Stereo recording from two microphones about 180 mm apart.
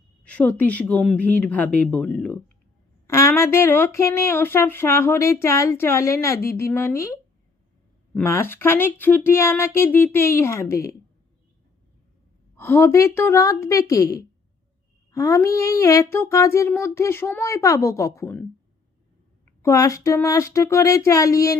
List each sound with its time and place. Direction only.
0.3 s a woman's voice: 10° left (ahead or behind)
8.2 s speech: 15° left (ahead or behind)
12.5 s speech: 15° left (ahead or behind)
19.5 s speech: 20° left (ahead or behind)